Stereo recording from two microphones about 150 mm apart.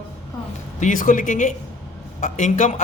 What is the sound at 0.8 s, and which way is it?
A man's voice, 60° left (ahead or behind).